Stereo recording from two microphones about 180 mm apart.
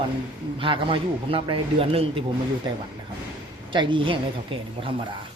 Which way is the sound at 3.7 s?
25° right (ahead or behind).